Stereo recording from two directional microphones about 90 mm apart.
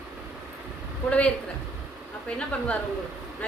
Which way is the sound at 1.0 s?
15° left (ahead or behind).